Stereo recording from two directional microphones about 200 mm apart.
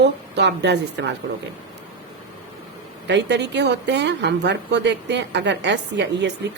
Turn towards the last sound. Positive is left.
turn(degrees=-60)  # may be behind; listen again after turning